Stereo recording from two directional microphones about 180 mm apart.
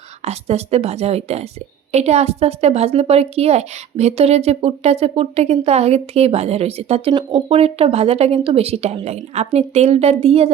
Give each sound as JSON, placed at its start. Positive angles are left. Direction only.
{"t": 0.3, "sound": "a woman's voice", "side_deg": -35}